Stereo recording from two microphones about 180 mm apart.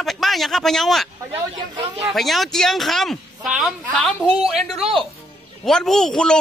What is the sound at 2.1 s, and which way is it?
Speech, centre (ahead or behind).